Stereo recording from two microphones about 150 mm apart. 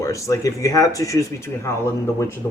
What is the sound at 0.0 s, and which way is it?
Speech, 20° left (ahead or behind).